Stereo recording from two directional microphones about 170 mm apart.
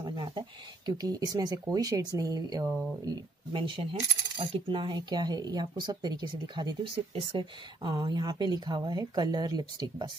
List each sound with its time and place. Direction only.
0.0 s speech: 25° right (ahead or behind)